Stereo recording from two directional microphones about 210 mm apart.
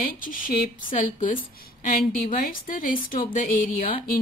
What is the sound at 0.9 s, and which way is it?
Speech, 40° left (ahead or behind).